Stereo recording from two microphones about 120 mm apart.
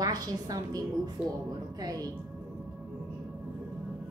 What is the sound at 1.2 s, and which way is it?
Speech, 5° right (ahead or behind).